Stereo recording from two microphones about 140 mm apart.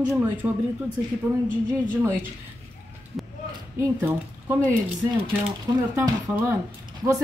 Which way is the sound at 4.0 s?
15° right (ahead or behind).